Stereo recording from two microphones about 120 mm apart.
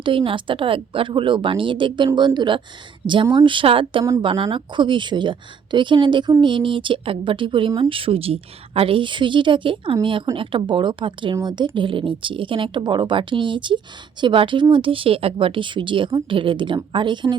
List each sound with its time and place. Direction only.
0.0 s a woman's voice: 45° right (ahead or behind)